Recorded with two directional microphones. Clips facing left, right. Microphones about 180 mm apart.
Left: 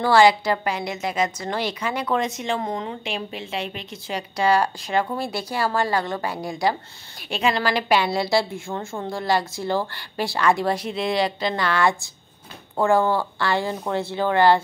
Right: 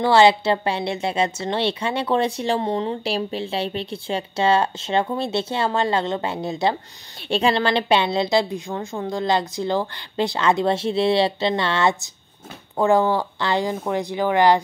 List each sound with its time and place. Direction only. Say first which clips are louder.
0.0 s a woman's voice: right 1 dB; 25° right (ahead or behind)